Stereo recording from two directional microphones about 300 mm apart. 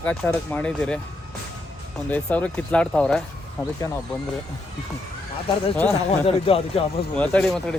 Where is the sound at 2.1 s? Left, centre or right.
Centre.